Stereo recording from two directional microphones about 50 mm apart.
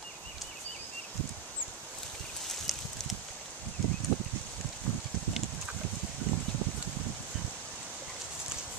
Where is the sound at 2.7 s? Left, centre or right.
Centre.